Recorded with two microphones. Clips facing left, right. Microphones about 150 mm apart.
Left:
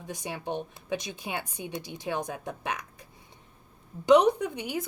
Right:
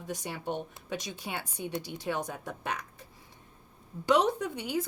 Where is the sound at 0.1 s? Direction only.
15° left (ahead or behind).